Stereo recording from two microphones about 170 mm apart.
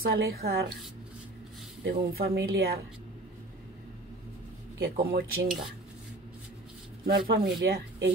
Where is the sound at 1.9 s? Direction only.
65° right (ahead or behind).